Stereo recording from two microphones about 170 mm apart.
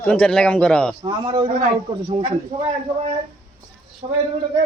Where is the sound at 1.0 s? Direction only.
25° right (ahead or behind).